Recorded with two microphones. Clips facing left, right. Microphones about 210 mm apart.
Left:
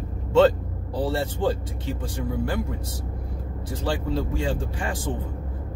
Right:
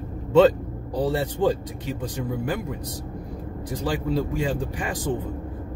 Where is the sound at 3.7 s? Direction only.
15° right (ahead or behind).